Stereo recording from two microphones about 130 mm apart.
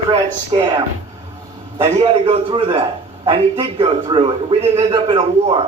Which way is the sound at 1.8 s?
50° right (ahead or behind).